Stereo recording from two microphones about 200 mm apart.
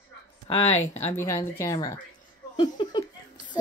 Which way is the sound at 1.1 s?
15° left (ahead or behind).